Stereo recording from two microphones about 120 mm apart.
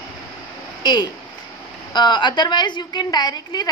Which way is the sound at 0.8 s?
35° left (ahead or behind).